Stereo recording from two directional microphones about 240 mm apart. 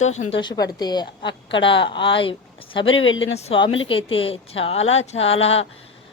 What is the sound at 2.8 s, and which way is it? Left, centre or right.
Speech, left.